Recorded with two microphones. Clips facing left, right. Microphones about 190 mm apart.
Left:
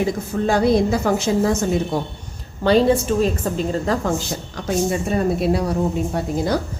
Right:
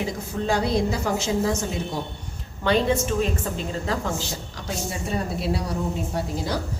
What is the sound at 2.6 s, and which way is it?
A woman's voice, 35° left (ahead or behind).